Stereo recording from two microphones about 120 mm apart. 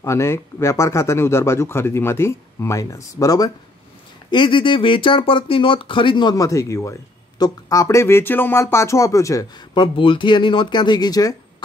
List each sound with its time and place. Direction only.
0.0 s speech: 25° left (ahead or behind)
4.3 s speech: 40° left (ahead or behind)
9.9 s speech: 45° left (ahead or behind)